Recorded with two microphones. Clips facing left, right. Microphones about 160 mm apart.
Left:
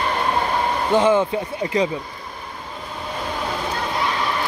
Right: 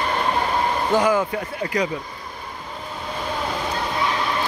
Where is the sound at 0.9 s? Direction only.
25° left (ahead or behind).